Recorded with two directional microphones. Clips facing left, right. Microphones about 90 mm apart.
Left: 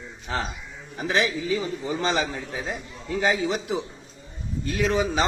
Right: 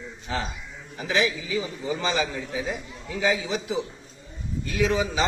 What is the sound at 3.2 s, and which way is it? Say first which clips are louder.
Speech: left 1 dB; 55° left (ahead or behind).